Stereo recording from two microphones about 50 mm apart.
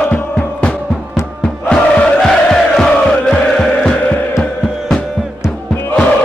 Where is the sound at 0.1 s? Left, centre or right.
Left.